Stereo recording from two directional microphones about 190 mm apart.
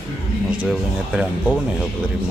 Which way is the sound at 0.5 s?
10° right (ahead or behind).